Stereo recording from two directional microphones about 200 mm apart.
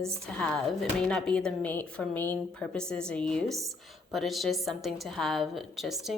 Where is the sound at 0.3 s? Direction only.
5° left (ahead or behind).